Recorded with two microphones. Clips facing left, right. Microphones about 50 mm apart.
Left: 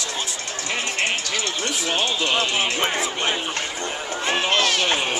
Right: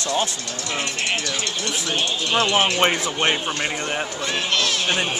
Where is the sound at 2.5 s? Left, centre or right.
Right.